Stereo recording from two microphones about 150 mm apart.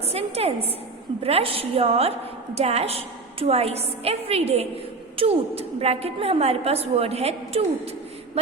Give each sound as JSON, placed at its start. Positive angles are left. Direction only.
{"t": 0.1, "sound": "a woman's voice", "side_deg": -45}